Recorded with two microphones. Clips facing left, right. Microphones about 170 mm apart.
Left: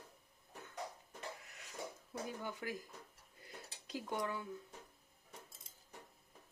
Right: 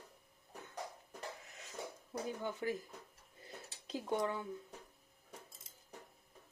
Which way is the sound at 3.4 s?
25° right (ahead or behind).